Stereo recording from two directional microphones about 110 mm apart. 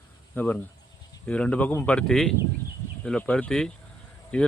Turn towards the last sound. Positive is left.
turn(degrees=10)  # may be behind; listen again after turning